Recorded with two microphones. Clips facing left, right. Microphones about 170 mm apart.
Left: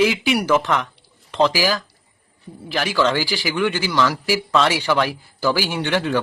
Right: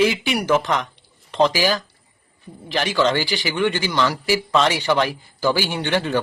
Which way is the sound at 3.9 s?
10° right (ahead or behind).